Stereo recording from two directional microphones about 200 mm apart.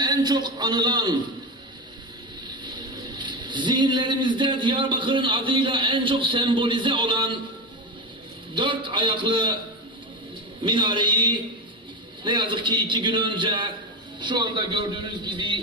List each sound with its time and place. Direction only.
0.0 s a man's voice: 20° right (ahead or behind)
2.6 s speech: 20° right (ahead or behind)
8.5 s speech: 25° right (ahead or behind)
10.6 s speech: 25° right (ahead or behind)